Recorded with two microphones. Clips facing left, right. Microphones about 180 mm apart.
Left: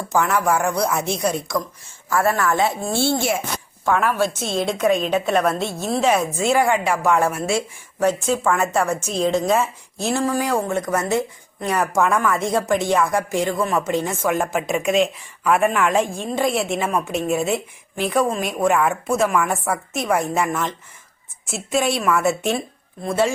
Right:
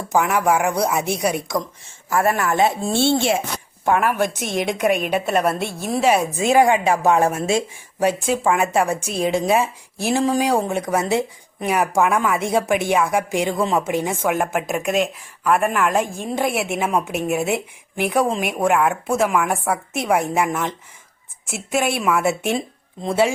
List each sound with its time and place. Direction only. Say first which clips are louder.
0.1 s a woman's voice: right 1 dB; 15° right (ahead or behind)
3.8 s a woman's voice: right 1 dB; 15° right (ahead or behind)